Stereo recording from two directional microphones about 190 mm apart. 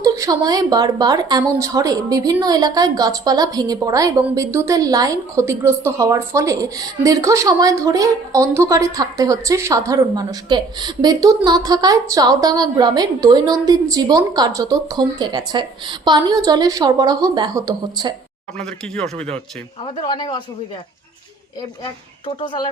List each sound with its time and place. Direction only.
0.0 s a woman's voice: 20° right (ahead or behind)
18.6 s speech: 5° left (ahead or behind)
19.8 s speech: 25° left (ahead or behind)
22.4 s speech: 25° left (ahead or behind)